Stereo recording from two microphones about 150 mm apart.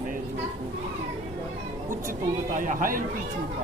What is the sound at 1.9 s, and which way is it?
Speech, 60° right (ahead or behind).